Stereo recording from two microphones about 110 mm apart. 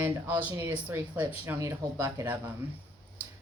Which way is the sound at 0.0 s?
15° right (ahead or behind).